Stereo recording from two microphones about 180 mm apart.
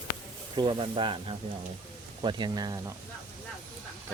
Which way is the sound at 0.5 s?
25° right (ahead or behind).